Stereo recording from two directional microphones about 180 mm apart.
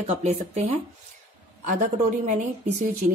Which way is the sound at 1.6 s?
45° right (ahead or behind).